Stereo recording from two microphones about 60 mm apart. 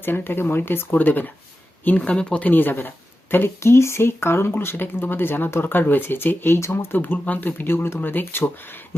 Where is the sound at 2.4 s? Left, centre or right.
Left.